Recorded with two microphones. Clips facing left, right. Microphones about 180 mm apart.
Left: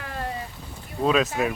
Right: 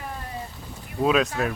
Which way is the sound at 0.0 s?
90° left.